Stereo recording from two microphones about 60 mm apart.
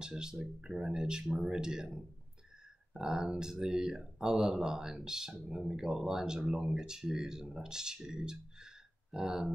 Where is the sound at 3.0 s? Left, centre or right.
Centre.